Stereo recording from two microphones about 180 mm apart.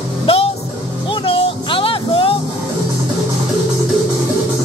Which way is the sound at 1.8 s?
30° left (ahead or behind).